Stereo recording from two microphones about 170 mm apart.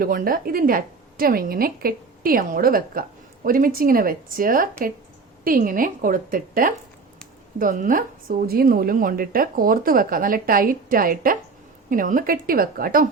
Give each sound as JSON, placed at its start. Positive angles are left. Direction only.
{"t": 0.0, "sound": "speech", "side_deg": -60}